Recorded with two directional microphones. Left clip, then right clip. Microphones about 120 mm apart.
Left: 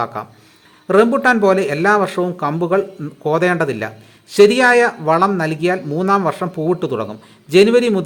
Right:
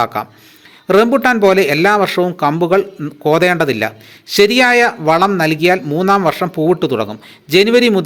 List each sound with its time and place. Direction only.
0.0 s speech: 20° right (ahead or behind)